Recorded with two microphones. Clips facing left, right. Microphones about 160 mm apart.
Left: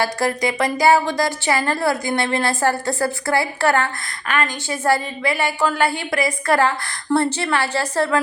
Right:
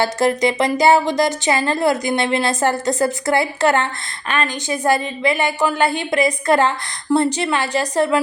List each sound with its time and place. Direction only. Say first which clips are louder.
0.0 s a woman's voice: right 4 dB; 25° right (ahead or behind)